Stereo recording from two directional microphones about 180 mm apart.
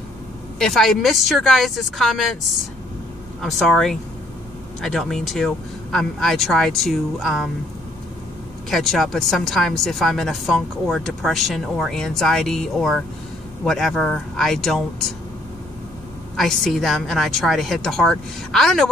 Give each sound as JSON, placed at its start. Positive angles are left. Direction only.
{"t": 0.6, "sound": "a woman's voice", "side_deg": 0}
{"t": 3.4, "sound": "a woman's voice", "side_deg": 0}
{"t": 8.6, "sound": "a woman's voice", "side_deg": 0}
{"t": 16.3, "sound": "a woman's voice", "side_deg": 0}